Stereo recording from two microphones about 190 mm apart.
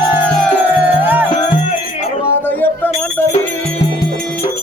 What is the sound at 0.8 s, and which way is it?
Music, 10° right (ahead or behind).